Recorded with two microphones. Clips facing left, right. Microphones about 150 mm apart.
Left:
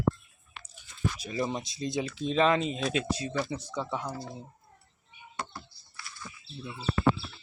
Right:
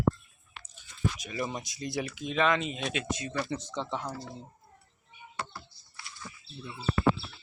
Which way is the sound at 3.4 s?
10° left (ahead or behind).